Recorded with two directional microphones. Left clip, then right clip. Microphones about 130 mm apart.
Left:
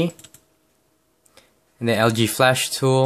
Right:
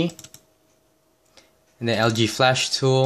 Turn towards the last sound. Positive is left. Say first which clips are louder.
# left 1 dB
turn(degrees=20)  # may be behind; listen again after turning